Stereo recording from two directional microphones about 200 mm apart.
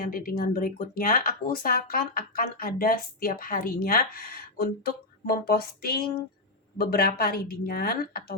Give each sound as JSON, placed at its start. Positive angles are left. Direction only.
{"t": 0.0, "sound": "speech", "side_deg": 45}